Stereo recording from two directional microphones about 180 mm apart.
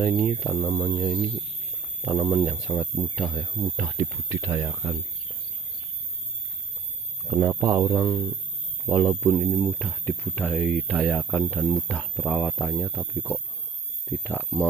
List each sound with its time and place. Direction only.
0.0 s speech: 5° right (ahead or behind)
3.9 s speech: 15° right (ahead or behind)
7.2 s speech: 15° right (ahead or behind)
9.3 s speech: centre (ahead or behind)
14.0 s speech: 10° left (ahead or behind)